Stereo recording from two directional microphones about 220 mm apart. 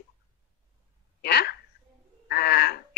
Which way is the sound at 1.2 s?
45° left (ahead or behind).